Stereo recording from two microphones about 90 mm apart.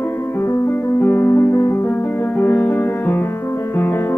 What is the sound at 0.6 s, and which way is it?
Music, 30° left (ahead or behind).